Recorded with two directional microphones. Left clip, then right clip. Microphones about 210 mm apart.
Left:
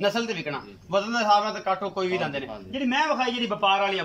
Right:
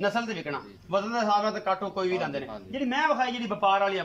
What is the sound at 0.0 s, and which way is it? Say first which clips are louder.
A man's voice: left 3 dB; 5° left (ahead or behind).